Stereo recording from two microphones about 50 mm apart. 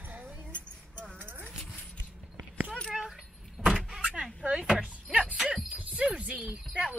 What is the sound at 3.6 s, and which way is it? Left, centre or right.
Vehicle, centre.